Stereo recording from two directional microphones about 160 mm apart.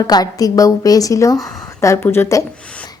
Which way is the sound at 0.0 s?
25° left (ahead or behind).